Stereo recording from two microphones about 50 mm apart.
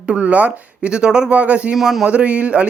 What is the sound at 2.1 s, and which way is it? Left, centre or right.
Speech, right.